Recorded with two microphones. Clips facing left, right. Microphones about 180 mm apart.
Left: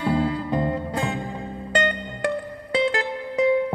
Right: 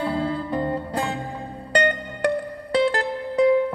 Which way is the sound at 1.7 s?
40° right (ahead or behind).